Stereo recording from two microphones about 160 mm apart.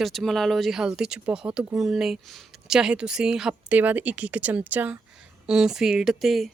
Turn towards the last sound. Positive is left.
turn(degrees=0)  # may be behind; listen again after turning